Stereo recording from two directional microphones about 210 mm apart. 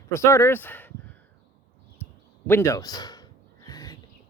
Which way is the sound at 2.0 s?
10° left (ahead or behind).